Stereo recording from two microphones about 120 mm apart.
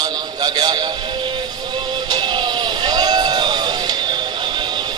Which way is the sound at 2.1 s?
35° right (ahead or behind).